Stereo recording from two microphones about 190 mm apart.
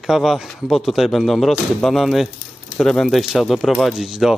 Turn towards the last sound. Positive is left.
turn(degrees=0)  # may be behind; listen again after turning